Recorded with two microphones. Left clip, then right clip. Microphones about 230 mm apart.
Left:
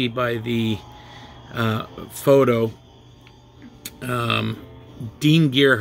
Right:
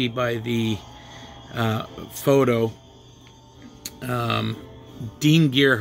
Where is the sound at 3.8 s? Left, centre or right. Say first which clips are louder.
Left 2 dB; centre.